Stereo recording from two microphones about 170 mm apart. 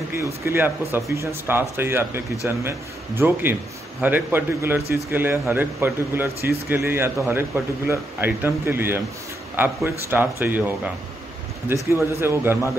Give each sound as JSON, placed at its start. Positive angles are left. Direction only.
{"t": 0.1, "sound": "speech", "side_deg": -15}
{"t": 11.7, "sound": "speech", "side_deg": -15}